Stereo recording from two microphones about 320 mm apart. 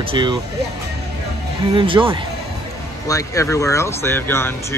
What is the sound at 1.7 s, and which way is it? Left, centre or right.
Speech, centre.